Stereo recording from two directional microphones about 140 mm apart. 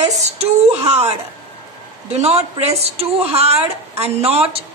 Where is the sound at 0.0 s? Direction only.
50° right (ahead or behind).